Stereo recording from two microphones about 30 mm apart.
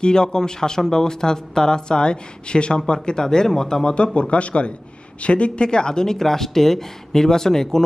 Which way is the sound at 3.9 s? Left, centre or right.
Left.